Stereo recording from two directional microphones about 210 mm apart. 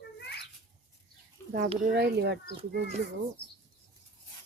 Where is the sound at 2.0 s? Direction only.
55° right (ahead or behind).